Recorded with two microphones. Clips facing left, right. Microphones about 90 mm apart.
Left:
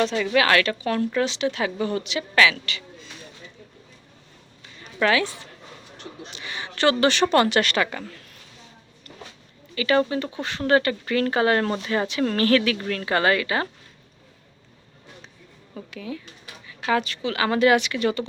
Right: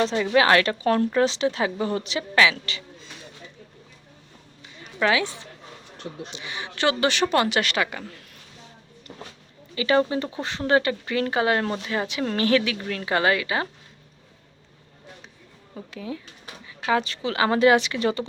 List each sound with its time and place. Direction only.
0.0 s a woman's voice: 20° right (ahead or behind)
4.8 s speech: 15° right (ahead or behind)
9.7 s speech: 25° right (ahead or behind)
10.6 s speech: 15° right (ahead or behind)
15.9 s speech: 25° right (ahead or behind)